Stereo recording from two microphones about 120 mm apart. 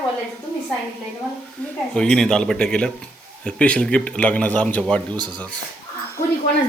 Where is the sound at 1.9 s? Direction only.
5° left (ahead or behind).